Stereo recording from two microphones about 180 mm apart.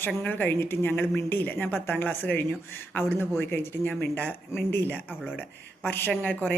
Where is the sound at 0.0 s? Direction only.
10° left (ahead or behind).